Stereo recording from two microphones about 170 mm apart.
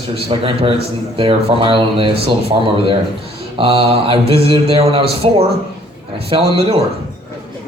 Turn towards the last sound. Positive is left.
turn(degrees=-35)  # may be behind; listen again after turning